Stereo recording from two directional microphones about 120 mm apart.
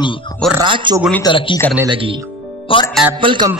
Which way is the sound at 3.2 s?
45° right (ahead or behind).